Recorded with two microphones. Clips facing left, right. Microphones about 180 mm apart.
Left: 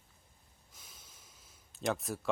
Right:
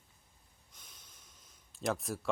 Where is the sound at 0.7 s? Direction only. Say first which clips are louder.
Left 2 dB; 5° left (ahead or behind).